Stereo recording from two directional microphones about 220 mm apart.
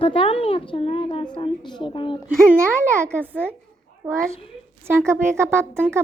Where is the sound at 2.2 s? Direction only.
10° right (ahead or behind).